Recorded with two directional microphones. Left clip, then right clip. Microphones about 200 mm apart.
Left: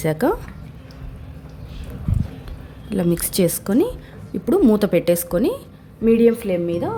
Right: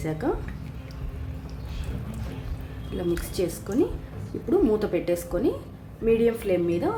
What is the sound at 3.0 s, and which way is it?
A woman's voice, 55° left (ahead or behind).